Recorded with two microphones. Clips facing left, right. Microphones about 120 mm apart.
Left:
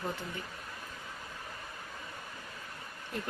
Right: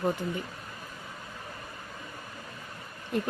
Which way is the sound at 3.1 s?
20° right (ahead or behind).